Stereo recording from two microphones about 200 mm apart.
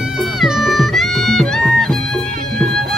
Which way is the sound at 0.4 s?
Centre (ahead or behind).